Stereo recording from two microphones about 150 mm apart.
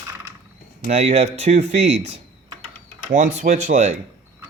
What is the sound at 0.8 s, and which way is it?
Speech, 45° right (ahead or behind).